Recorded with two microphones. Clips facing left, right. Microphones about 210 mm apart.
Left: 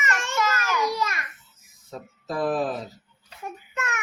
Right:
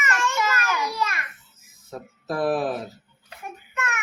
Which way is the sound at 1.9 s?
5° right (ahead or behind).